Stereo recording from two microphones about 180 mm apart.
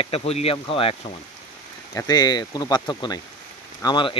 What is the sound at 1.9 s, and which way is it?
Speech, 20° left (ahead or behind).